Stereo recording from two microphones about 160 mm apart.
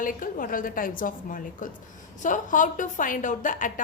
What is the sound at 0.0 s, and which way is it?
A woman's voice, 55° left (ahead or behind).